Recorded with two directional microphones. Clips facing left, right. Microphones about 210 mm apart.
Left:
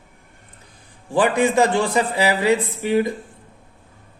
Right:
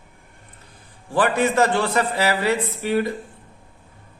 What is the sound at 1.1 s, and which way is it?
A man's voice, 15° left (ahead or behind).